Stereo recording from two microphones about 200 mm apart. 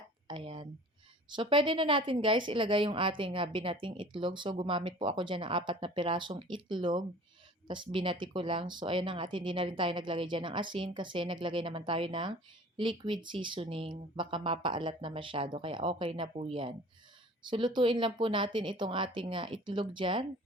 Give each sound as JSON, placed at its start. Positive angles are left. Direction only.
{"t": 0.3, "sound": "a woman's voice", "side_deg": -25}